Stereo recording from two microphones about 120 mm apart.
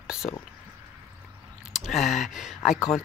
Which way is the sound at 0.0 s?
5° right (ahead or behind).